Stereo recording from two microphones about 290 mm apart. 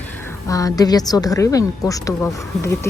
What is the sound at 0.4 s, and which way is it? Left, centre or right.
A woman's voice, centre.